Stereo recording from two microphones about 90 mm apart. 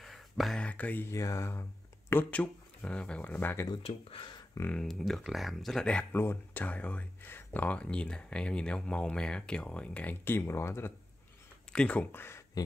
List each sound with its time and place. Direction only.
0.0 s a sound: centre (ahead or behind)
0.6 s speech: 15° left (ahead or behind)
1.1 s speech: 35° left (ahead or behind)
2.3 s speech: 15° left (ahead or behind)
3.8 s speech: 80° left
4.6 s speech: 5° left (ahead or behind)
6.1 s speech: 20° left (ahead or behind)
11.7 s speech: 15° left (ahead or behind)